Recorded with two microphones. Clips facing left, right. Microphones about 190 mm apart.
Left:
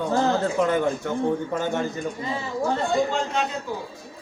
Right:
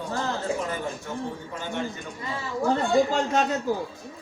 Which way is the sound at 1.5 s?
45° left (ahead or behind).